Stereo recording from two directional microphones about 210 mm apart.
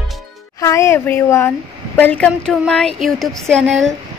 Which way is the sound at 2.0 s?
5° left (ahead or behind).